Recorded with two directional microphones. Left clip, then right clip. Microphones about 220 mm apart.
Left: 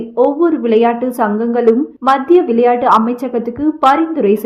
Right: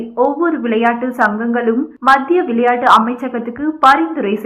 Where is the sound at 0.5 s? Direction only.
60° left (ahead or behind).